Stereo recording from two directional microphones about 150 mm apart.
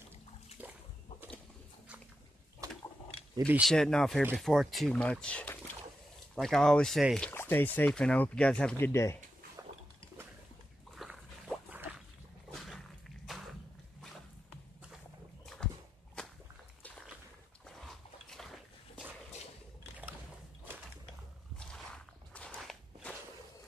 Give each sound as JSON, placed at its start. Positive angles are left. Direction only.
{"t": 0.6, "sound": "splash", "side_deg": -10}
{"t": 2.6, "sound": "a sound", "side_deg": -20}
{"t": 3.3, "sound": "speech", "side_deg": -15}
{"t": 3.6, "sound": "speech", "side_deg": 5}
{"t": 7.2, "sound": "speech", "side_deg": 15}
{"t": 11.0, "sound": "a sound", "side_deg": 0}
{"t": 11.7, "sound": "a sound", "side_deg": -10}
{"t": 12.5, "sound": "a sound", "side_deg": 0}
{"t": 15.4, "sound": "dog", "side_deg": 5}
{"t": 16.2, "sound": "whip", "side_deg": 5}
{"t": 17.6, "sound": "dog", "side_deg": 0}
{"t": 21.5, "sound": "walk", "side_deg": 5}